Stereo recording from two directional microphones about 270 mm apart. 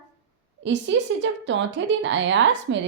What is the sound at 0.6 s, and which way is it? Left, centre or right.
A woman's voice, right.